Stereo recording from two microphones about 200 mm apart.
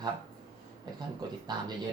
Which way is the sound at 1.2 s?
20° right (ahead or behind).